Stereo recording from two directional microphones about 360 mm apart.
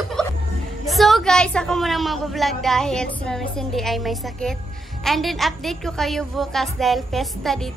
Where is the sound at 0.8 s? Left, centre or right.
Centre.